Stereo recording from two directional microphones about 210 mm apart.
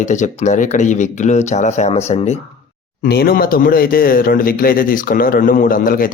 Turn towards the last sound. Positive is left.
turn(degrees=40)  # may be behind; listen again after turning